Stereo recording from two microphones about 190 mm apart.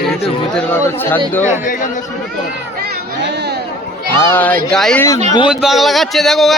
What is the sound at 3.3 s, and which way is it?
Chatter, 60° right (ahead or behind).